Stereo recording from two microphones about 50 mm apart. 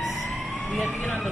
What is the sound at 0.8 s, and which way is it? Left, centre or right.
Speech, left.